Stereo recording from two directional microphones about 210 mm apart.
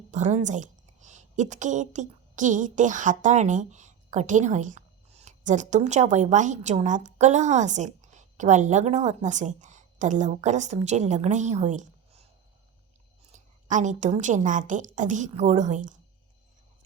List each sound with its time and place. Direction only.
0.1 s a woman's voice: 35° right (ahead or behind)
13.3 s a woman's voice: 35° right (ahead or behind)